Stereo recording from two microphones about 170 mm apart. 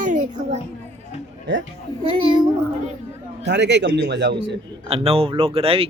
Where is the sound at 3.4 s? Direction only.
90° right.